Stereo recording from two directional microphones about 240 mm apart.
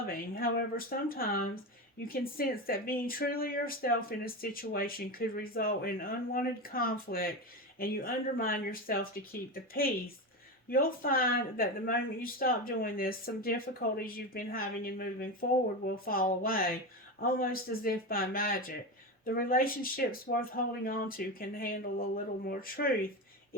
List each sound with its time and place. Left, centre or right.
0.0 s speech: left